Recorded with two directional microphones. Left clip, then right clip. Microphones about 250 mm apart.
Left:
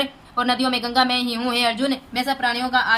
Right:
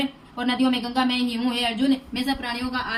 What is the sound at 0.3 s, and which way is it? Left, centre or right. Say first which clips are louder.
A woman's voice: left 4 dB; centre.